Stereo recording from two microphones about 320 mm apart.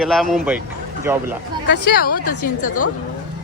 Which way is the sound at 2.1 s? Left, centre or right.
Left.